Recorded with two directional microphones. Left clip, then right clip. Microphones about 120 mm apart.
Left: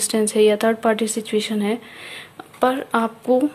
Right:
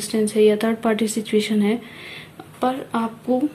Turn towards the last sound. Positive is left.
turn(degrees=85)